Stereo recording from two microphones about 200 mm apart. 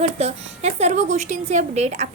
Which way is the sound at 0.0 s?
30° right (ahead or behind).